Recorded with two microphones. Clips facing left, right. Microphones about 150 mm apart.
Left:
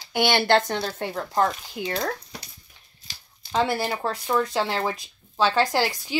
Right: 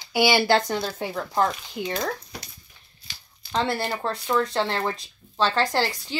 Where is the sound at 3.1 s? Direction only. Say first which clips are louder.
Right 1 dB; 35° left (ahead or behind).